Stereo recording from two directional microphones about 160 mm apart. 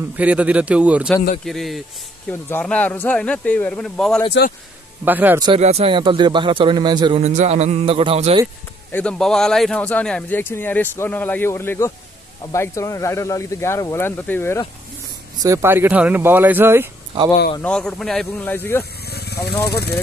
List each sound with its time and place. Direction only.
0.1 s speech: 10° right (ahead or behind)
5.0 s speech: 10° right (ahead or behind)
5.6 s a man's voice: 40° right (ahead or behind)
7.2 s speech: 45° right (ahead or behind)
8.9 s speech: 5° left (ahead or behind)
15.4 s speech: 15° right (ahead or behind)
17.6 s speech: 5° left (ahead or behind)
19.0 s a sound: 85° left
19.6 s speech: 85° left